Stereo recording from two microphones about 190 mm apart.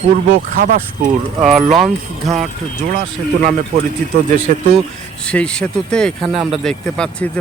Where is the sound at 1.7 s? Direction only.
Centre (ahead or behind).